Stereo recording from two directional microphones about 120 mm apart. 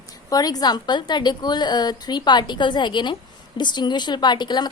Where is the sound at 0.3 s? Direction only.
30° left (ahead or behind).